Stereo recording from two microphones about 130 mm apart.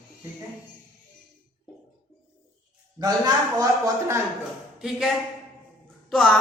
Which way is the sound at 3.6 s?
25° right (ahead or behind).